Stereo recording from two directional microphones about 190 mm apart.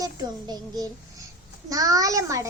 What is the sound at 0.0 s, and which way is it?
A child's voice, 20° right (ahead or behind).